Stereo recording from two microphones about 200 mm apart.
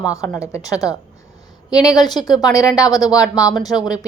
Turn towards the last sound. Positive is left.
turn(degrees=20)  # may be behind; listen again after turning